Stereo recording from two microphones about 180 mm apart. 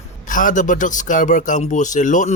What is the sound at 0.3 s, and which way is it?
A man's voice, 45° left (ahead or behind).